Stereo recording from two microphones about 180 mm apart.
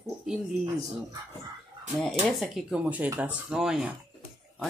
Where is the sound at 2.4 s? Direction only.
5° right (ahead or behind).